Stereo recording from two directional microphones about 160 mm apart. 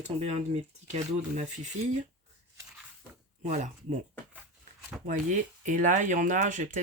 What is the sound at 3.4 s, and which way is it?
Speech, 50° right (ahead or behind).